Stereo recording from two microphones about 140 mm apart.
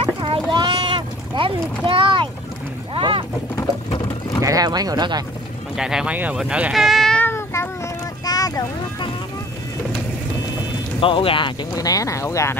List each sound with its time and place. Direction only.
0.0 s boat: 40° right (ahead or behind)
4.4 s speech: 25° right (ahead or behind)
5.8 s speech: 5° right (ahead or behind)
7.2 s a sound: 15° left (ahead or behind)
11.0 s speech: 40° left (ahead or behind); by 12.5 s 20° left (ahead or behind)